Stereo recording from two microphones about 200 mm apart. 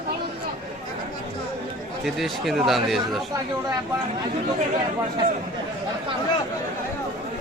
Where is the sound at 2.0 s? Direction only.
Centre (ahead or behind).